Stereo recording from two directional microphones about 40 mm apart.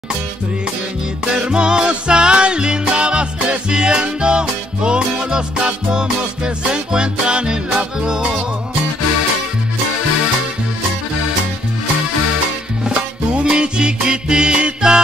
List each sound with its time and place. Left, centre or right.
1.3 s music: right
12.8 s music: right